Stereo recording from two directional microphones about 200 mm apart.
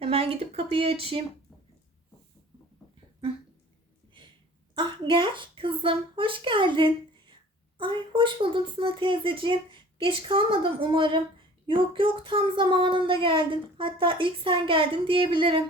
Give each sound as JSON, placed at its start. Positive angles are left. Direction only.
{"t": 0.0, "sound": "speech", "side_deg": -30}
{"t": 4.7, "sound": "a child's voice", "side_deg": -25}